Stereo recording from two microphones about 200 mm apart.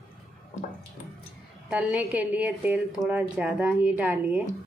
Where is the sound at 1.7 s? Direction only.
5° right (ahead or behind).